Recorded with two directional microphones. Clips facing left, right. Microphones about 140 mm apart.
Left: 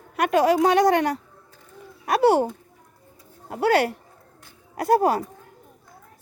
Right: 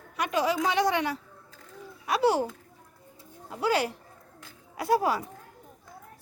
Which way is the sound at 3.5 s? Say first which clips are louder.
Left 6 dB; 60° left (ahead or behind).